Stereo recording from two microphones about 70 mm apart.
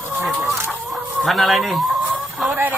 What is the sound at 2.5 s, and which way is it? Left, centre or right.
Speech, right.